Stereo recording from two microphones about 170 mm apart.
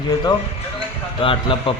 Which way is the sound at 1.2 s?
30° left (ahead or behind).